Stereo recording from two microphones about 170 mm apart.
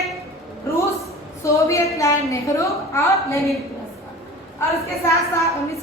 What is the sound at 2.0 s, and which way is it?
A woman's voice, 20° left (ahead or behind).